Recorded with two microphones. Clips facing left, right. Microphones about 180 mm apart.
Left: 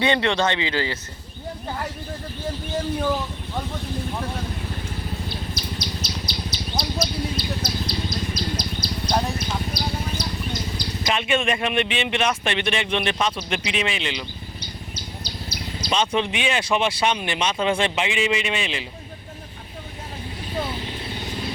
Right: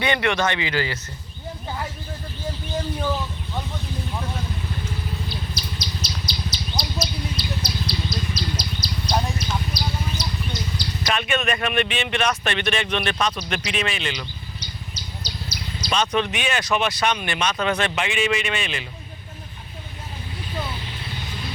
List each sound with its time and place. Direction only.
0.0 s speech: 25° left (ahead or behind)
5.3 s bird: 55° left (ahead or behind)
11.0 s speech: 25° left (ahead or behind)
14.6 s chirp: 55° left (ahead or behind)
15.9 s speech: 25° left (ahead or behind)